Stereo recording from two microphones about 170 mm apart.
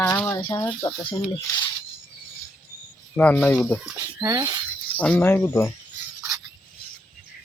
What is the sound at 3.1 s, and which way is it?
Speech, 10° left (ahead or behind).